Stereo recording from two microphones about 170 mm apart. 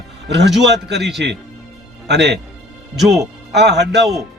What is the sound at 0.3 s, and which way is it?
A man's voice, 90° right.